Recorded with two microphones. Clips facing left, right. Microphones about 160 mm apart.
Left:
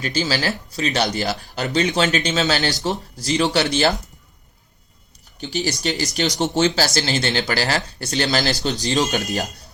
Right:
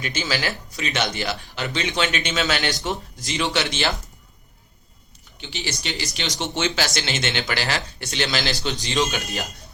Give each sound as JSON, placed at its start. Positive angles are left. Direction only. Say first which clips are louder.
{"t": 0.0, "sound": "speech", "louder": "left 4 dB", "side_deg": 35}
{"t": 5.4, "sound": "speech", "louder": "left 7 dB", "side_deg": 40}